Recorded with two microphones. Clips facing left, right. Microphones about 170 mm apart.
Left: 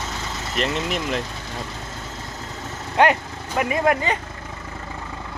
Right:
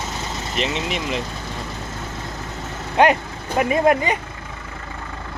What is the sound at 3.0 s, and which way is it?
Speech, 20° right (ahead or behind).